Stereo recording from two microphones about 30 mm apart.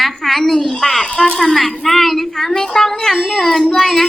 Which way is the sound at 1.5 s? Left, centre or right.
Centre.